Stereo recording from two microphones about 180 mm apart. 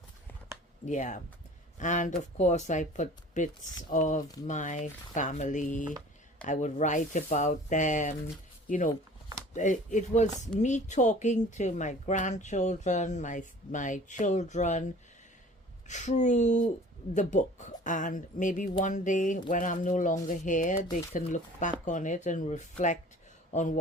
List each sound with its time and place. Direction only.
0.9 s speech: 45° left (ahead or behind)
9.5 s a woman's voice: 45° left (ahead or behind)
15.9 s a woman's voice: 40° left (ahead or behind)